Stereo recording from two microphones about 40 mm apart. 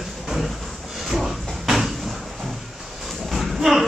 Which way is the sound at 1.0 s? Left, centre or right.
Centre.